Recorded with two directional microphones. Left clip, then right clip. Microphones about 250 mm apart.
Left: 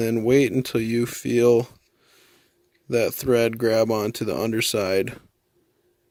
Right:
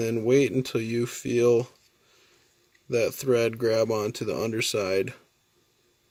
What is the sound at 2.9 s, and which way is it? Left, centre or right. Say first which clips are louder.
Speech: left 3 dB; left.